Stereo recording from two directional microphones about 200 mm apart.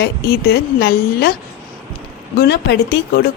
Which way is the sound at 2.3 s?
55° left (ahead or behind).